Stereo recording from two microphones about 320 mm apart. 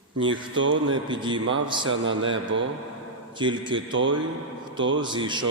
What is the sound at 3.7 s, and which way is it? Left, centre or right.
Speech, right.